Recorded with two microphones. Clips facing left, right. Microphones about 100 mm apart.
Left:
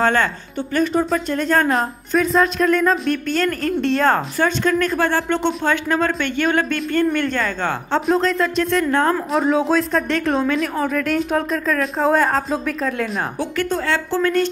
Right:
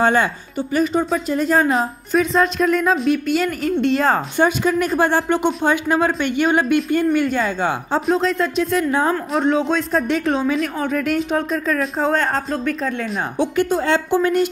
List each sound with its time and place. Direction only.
0.0 s speech: 15° right (ahead or behind)
4.5 s speech: 15° right (ahead or behind)
13.8 s speech: 20° right (ahead or behind)